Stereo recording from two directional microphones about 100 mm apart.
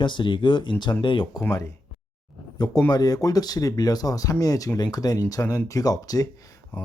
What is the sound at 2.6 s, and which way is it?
Speech, 45° left (ahead or behind).